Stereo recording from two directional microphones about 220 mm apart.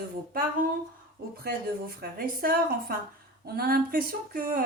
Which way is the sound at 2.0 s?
40° right (ahead or behind).